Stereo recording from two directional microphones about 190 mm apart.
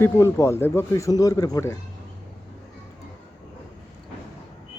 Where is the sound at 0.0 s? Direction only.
15° left (ahead or behind).